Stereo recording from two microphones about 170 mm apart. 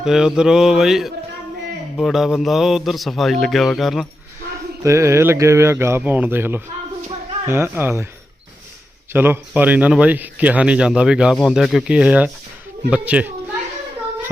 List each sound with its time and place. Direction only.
0.0 s a man's voice: 5° right (ahead or behind)
4.8 s speech: 15° right (ahead or behind)
9.1 s a man's voice: 10° right (ahead or behind)